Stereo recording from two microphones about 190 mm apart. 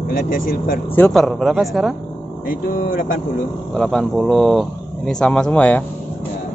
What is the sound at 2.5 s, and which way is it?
Speech, 50° left (ahead or behind).